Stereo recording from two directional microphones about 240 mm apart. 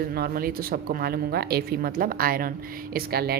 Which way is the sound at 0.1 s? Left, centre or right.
Right.